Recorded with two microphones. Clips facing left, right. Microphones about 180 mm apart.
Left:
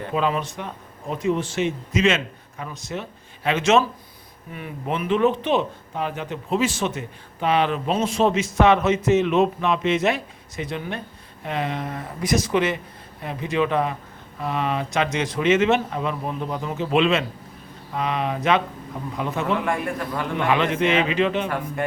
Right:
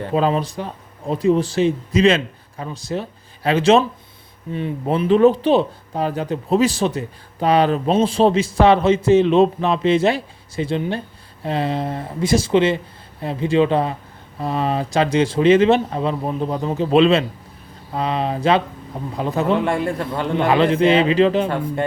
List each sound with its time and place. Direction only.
0.0 s speech: 35° right (ahead or behind)